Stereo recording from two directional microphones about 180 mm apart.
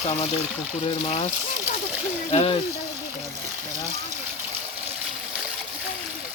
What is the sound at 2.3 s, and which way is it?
Speech, 30° left (ahead or behind).